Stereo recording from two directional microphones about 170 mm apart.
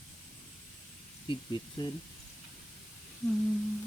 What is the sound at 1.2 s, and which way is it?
Speech, 25° left (ahead or behind).